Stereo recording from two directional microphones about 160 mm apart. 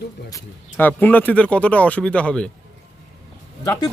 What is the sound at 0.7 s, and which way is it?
Speech, 10° left (ahead or behind).